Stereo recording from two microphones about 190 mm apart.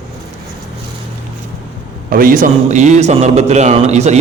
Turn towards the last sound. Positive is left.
turn(degrees=-35)  # may be behind; listen again after turning